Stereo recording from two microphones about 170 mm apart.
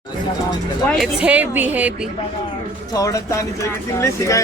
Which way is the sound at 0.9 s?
Centre (ahead or behind).